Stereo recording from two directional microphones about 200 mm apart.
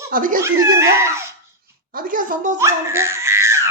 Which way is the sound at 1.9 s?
45° right (ahead or behind).